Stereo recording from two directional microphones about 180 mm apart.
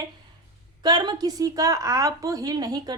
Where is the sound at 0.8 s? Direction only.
20° right (ahead or behind).